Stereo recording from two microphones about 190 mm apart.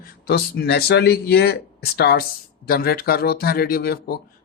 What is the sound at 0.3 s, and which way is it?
Speech, 55° left (ahead or behind).